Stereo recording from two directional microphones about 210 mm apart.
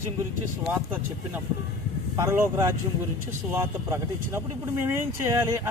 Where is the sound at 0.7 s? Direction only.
5° right (ahead or behind).